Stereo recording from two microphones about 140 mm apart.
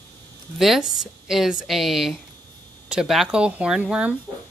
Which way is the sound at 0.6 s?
Centre (ahead or behind).